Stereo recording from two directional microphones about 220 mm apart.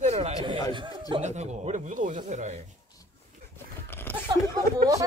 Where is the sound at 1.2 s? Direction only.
30° right (ahead or behind).